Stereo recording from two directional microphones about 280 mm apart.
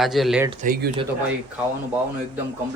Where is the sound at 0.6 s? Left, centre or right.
Right.